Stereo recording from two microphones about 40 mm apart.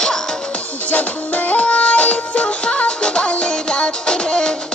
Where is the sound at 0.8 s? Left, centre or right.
Left.